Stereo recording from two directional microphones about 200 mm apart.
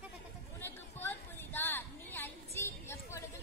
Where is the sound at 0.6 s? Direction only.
10° left (ahead or behind).